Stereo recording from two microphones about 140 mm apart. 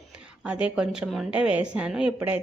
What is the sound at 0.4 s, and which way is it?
A woman's voice, 10° right (ahead or behind).